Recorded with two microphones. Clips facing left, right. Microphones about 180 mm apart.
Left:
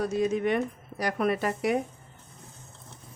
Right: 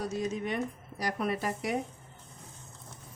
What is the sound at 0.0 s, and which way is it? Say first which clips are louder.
Speech: left 7 dB; 60° left (ahead or behind).